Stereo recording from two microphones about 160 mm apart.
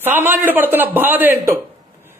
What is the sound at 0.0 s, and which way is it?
Speech, 10° right (ahead or behind).